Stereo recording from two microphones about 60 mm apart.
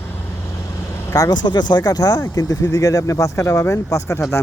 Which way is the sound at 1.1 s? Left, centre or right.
Left.